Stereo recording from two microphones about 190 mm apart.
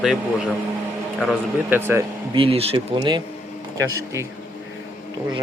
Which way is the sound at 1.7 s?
15° right (ahead or behind).